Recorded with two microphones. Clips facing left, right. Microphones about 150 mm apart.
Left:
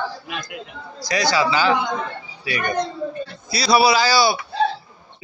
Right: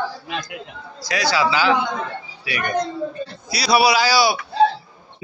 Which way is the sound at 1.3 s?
5° right (ahead or behind).